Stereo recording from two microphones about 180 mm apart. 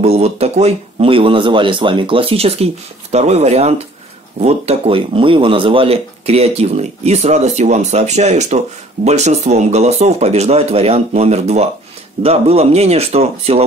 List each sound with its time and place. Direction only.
0.0 s speech: 35° right (ahead or behind)